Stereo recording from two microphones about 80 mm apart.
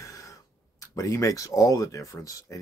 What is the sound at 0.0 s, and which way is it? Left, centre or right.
Speech, left.